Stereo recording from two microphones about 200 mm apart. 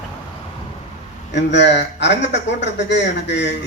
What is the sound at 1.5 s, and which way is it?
Speech, 60° left (ahead or behind).